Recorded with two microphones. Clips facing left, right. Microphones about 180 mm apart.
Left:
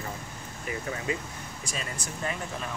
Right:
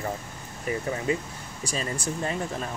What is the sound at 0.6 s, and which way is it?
Speech, 30° right (ahead or behind).